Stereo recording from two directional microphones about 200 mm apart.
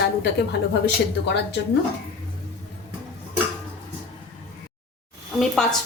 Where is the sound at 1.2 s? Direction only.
60° left (ahead or behind).